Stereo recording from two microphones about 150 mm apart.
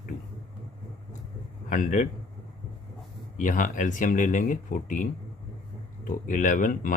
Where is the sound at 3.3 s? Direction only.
60° left (ahead or behind).